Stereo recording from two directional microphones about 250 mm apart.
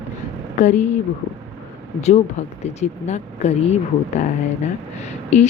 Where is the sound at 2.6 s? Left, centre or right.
Left.